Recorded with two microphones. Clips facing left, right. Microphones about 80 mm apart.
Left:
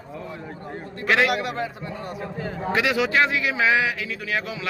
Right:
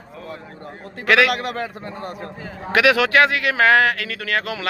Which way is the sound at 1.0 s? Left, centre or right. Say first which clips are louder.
Right 4 dB; right.